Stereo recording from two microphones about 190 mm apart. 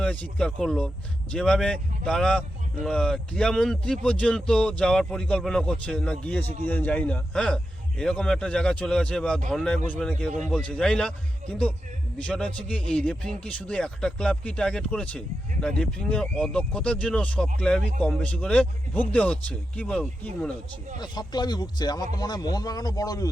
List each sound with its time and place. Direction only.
0.0 s a man's voice: 5° left (ahead or behind)
21.0 s speech: 20° left (ahead or behind)